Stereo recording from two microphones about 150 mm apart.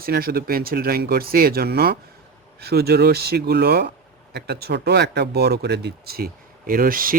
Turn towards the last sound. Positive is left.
turn(degrees=-70)  # may be behind; listen again after turning